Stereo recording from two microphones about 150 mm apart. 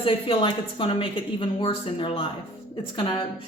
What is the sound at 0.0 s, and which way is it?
A woman's voice, 35° left (ahead or behind).